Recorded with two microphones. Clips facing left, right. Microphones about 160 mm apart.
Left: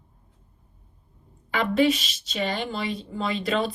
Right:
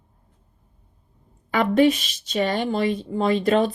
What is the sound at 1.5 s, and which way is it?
A woman's voice, 50° right (ahead or behind).